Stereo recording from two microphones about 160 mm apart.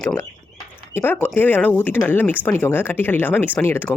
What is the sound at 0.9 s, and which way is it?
A woman's voice, 15° left (ahead or behind).